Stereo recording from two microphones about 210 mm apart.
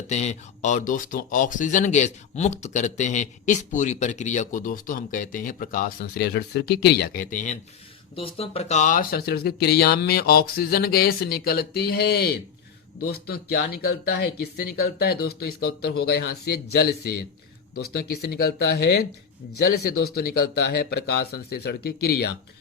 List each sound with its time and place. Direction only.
0.1 s speech: 30° left (ahead or behind); by 22.3 s 50° left (ahead or behind)